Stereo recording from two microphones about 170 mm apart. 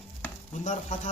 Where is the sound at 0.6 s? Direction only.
45° left (ahead or behind).